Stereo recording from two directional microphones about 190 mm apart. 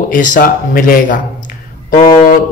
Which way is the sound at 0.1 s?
45° left (ahead or behind).